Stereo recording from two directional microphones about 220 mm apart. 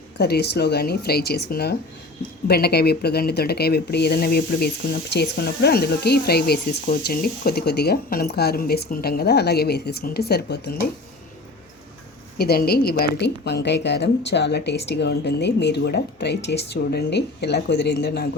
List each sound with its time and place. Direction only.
0.2 s speech: 45° left (ahead or behind)
12.4 s speech: 45° left (ahead or behind)